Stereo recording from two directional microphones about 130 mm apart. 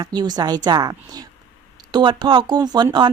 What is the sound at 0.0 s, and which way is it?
A woman's voice, 30° right (ahead or behind).